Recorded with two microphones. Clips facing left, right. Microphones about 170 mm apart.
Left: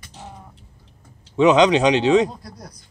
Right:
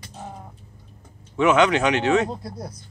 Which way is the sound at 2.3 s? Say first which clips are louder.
Right 6 dB; 25° right (ahead or behind).